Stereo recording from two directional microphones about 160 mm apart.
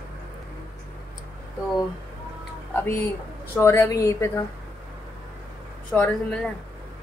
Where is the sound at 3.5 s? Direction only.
15° left (ahead or behind).